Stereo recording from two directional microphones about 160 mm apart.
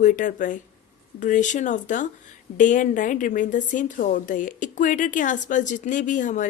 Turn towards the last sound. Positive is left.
turn(degrees=50)  # may be behind; listen again after turning